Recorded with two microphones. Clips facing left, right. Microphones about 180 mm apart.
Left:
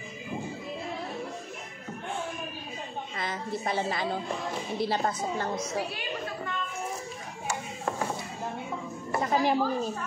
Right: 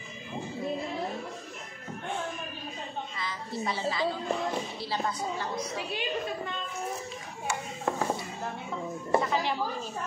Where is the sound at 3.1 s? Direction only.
50° left (ahead or behind).